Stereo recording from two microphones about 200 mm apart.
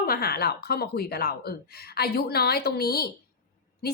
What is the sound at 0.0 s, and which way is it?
A woman's voice, 50° left (ahead or behind).